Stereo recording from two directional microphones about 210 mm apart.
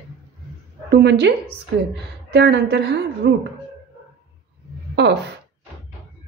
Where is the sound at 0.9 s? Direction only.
55° right (ahead or behind).